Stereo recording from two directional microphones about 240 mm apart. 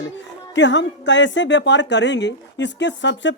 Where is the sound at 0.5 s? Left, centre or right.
Left.